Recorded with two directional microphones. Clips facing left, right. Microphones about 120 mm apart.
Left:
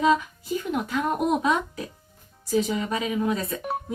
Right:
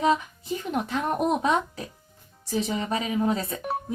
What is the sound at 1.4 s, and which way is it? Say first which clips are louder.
Speech: even; 30° right (ahead or behind).